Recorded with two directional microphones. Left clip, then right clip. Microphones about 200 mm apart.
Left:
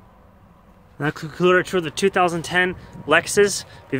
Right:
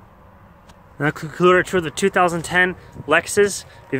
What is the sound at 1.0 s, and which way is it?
Speech, 10° right (ahead or behind).